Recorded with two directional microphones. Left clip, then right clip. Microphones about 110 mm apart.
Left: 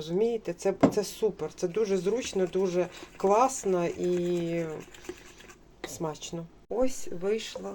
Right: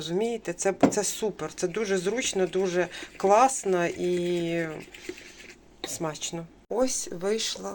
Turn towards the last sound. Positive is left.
turn(degrees=10)  # may be behind; listen again after turning